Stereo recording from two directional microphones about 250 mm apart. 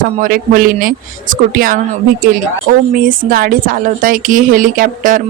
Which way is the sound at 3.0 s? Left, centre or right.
Right.